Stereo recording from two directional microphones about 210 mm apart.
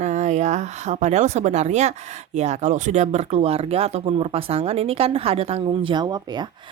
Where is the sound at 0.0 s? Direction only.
35° right (ahead or behind).